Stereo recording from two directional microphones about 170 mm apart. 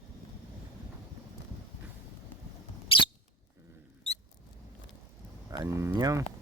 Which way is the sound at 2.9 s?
30° left (ahead or behind).